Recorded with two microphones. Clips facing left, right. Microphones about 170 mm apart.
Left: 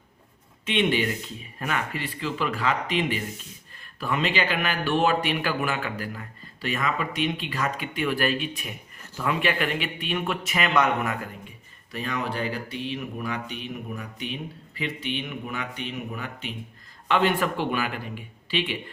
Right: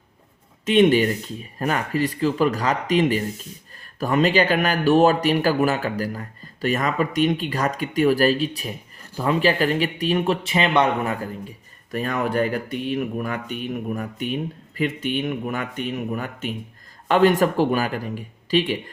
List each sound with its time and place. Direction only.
0.6 s speech: 40° right (ahead or behind)
11.9 s speech: 50° right (ahead or behind)